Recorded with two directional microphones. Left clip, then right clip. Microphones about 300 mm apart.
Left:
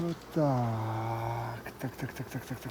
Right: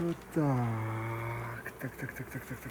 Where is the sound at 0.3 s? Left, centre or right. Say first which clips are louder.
Left 4 dB; centre.